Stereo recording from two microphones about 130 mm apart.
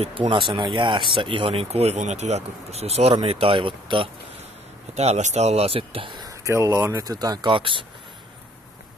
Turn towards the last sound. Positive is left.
turn(degrees=-40)  # may be behind; listen again after turning